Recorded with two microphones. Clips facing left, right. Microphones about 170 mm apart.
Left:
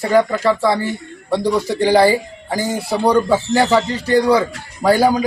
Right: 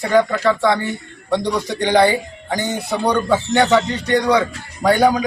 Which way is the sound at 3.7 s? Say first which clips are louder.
Left 2 dB; 30° left (ahead or behind).